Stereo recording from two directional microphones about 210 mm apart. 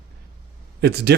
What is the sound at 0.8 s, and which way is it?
Speech, 50° right (ahead or behind).